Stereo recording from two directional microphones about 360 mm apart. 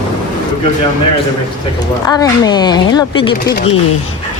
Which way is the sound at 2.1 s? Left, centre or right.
Centre.